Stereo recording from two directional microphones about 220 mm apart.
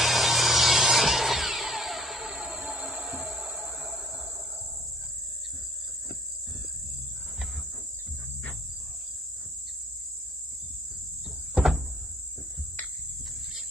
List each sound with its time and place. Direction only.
0.0 s tools: centre (ahead or behind)
11.5 s cupboard open or close: centre (ahead or behind)